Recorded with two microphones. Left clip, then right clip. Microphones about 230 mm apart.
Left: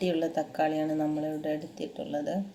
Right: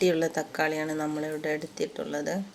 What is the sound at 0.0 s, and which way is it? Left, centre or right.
Speech, right.